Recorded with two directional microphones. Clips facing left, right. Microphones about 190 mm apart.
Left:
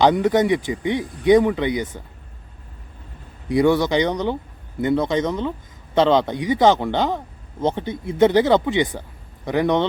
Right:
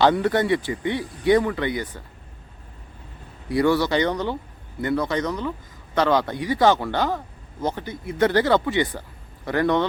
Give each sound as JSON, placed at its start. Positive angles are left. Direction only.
{"t": 0.0, "sound": "speech", "side_deg": 15}
{"t": 3.5, "sound": "speech", "side_deg": 20}